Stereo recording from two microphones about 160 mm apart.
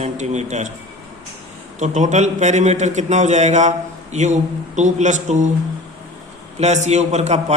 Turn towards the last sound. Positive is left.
turn(degrees=-45)  # may be behind; listen again after turning